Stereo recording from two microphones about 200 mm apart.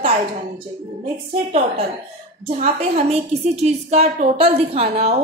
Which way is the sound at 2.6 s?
30° right (ahead or behind).